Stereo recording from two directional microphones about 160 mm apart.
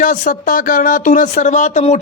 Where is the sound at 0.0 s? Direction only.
55° left (ahead or behind).